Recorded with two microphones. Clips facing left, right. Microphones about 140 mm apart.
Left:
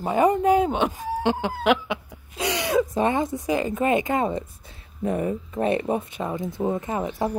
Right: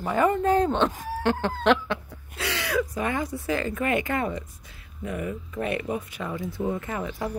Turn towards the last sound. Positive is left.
turn(degrees=25)  # may be behind; listen again after turning